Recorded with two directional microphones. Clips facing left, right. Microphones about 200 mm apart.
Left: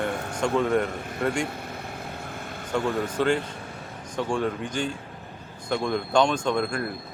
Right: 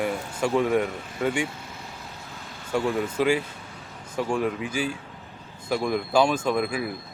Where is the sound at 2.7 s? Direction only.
5° right (ahead or behind).